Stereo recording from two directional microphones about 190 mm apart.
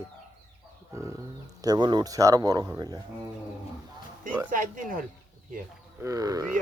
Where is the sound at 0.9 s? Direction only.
15° right (ahead or behind).